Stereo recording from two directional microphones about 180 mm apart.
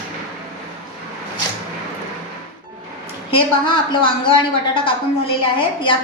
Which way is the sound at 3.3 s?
30° left (ahead or behind).